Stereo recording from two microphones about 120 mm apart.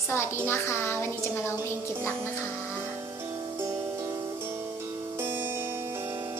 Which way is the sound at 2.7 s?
15° right (ahead or behind).